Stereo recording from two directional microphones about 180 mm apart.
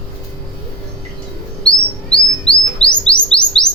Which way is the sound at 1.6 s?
5° left (ahead or behind).